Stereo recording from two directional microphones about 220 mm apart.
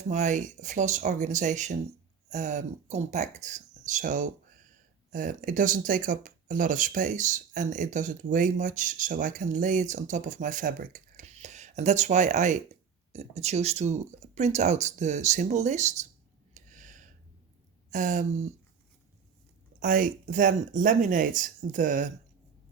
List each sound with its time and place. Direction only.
0.1 s speech: 35° right (ahead or behind)
16.6 s a sound: 35° right (ahead or behind)
17.9 s speech: 35° right (ahead or behind)
19.8 s speech: 35° right (ahead or behind)